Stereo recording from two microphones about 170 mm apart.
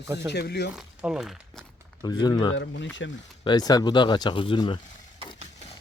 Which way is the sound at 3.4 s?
25° left (ahead or behind).